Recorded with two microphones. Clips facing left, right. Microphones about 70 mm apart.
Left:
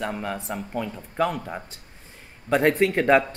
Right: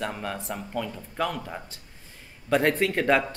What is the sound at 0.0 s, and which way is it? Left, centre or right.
A man's voice, centre.